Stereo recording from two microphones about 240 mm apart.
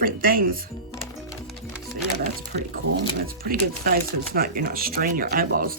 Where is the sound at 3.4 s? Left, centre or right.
Right.